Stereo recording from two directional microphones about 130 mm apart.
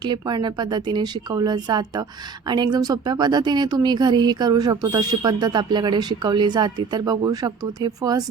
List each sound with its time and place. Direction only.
0.0 s a woman's voice: 35° right (ahead or behind)